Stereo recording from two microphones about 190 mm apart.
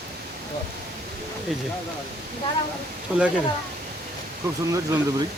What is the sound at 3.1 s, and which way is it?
Speech, 5° right (ahead or behind).